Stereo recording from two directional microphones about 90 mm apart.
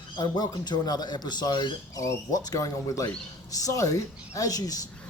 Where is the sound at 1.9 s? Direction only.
40° left (ahead or behind).